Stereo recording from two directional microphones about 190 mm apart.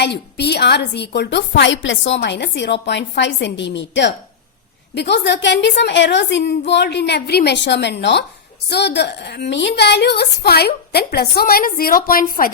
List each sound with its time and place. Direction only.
0.0 s a woman's voice: 60° left (ahead or behind)
2.2 s a woman's voice: 65° left (ahead or behind); by 12.5 s 50° left (ahead or behind)